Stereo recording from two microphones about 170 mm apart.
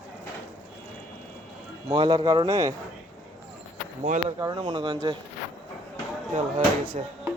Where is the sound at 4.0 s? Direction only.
40° right (ahead or behind).